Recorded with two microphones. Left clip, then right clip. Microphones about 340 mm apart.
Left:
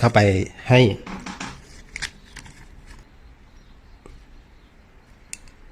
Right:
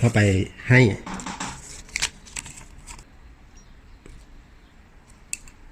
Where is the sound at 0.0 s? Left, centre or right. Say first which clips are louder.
Left 6 dB; left.